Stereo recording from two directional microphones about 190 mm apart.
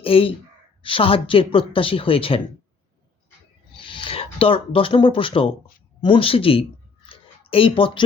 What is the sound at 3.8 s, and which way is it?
Speech, 25° left (ahead or behind).